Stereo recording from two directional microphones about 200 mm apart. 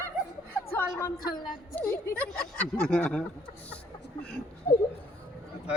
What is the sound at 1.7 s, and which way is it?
Speech, 10° left (ahead or behind).